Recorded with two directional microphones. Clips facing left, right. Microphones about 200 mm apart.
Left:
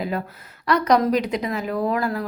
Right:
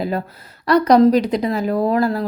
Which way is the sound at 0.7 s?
35° right (ahead or behind).